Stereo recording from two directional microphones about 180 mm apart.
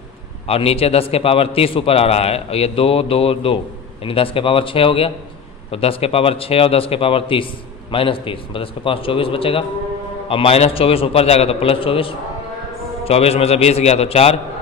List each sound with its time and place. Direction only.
0.5 s a man's voice: 35° left (ahead or behind)